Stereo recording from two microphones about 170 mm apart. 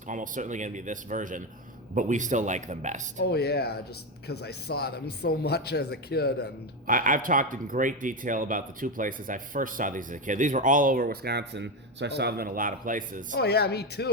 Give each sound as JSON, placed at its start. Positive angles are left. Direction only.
{"t": 0.1, "sound": "speech", "side_deg": -50}
{"t": 3.2, "sound": "speech", "side_deg": 70}
{"t": 6.8, "sound": "speech", "side_deg": -55}
{"t": 13.3, "sound": "speech", "side_deg": 75}